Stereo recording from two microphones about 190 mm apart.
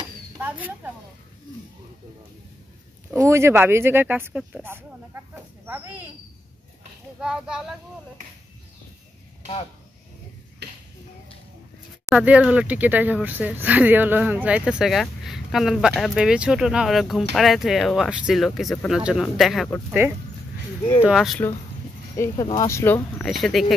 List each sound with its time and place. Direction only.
0.4 s speech: 10° right (ahead or behind)
3.1 s speech: 15° right (ahead or behind)
7.2 s speech: 5° right (ahead or behind)
10.6 s a sound: 60° right (ahead or behind)
12.1 s speech: 5° right (ahead or behind)
22.1 s speech: 15° left (ahead or behind)
23.3 s speech: centre (ahead or behind)